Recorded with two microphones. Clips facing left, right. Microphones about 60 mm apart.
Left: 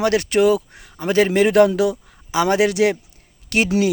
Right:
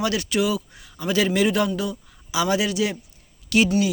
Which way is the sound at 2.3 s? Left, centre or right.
Left.